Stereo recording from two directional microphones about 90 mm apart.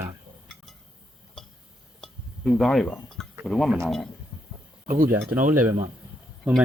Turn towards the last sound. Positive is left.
turn(degrees=-15)  # may be behind; listen again after turning